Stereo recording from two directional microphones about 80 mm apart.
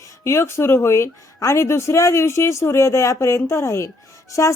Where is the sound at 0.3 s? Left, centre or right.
Left.